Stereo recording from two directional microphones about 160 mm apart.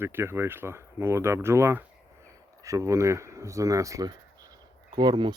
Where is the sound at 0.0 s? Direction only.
15° right (ahead or behind).